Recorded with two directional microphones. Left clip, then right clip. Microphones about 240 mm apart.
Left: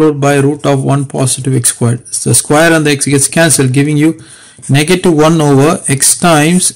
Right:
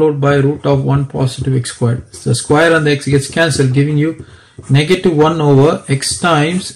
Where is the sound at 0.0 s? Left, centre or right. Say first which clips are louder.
Left 3 dB; left.